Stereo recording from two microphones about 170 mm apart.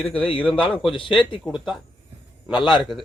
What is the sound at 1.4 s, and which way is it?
A man's voice, centre (ahead or behind).